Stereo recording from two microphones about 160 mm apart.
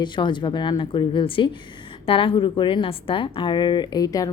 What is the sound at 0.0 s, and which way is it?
Speech, 30° left (ahead or behind).